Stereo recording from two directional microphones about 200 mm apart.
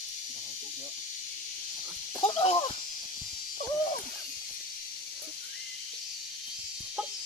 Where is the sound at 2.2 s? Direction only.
25° left (ahead or behind).